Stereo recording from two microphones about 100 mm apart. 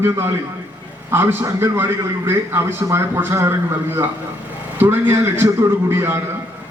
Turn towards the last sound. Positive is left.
turn(degrees=-25)  # may be behind; listen again after turning